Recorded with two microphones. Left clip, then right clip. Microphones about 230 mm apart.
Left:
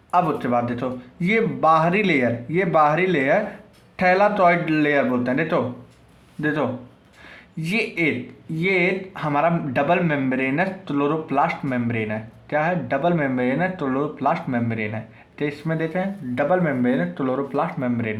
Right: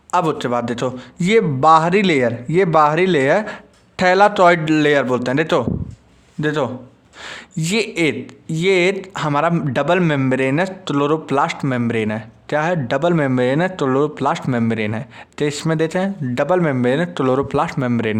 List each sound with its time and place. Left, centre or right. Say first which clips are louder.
0.1 s a man's voice: right 2 dB; right